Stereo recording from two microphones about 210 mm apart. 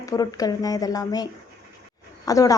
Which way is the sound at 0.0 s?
15° left (ahead or behind).